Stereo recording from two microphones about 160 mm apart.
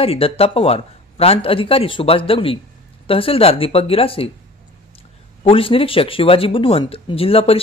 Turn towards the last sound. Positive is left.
turn(degrees=35)  # may be behind; listen again after turning